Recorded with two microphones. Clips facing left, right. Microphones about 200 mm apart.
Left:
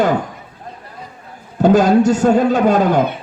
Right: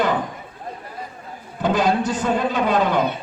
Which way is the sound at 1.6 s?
45° left (ahead or behind).